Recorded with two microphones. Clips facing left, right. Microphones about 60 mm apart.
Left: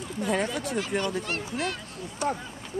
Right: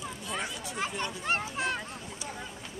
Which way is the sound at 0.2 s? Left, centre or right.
Left.